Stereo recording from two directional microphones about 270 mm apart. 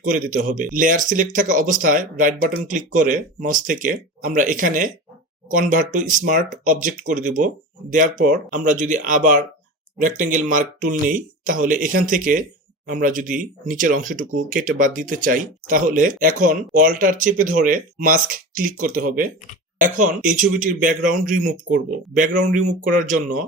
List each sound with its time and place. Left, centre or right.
0.0 s speech: right